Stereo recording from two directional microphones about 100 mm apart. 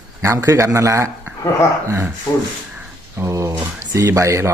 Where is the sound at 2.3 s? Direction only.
35° left (ahead or behind).